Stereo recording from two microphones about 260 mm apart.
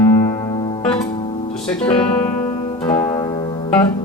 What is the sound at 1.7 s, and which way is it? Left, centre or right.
Speech, left.